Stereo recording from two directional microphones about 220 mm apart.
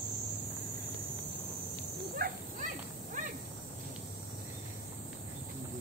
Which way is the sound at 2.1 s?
40° right (ahead or behind).